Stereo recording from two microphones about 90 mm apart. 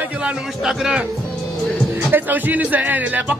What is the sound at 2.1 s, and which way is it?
Speech, 20° right (ahead or behind).